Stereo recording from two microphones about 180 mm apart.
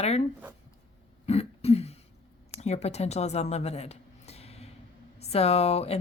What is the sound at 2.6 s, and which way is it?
Speech, 40° left (ahead or behind).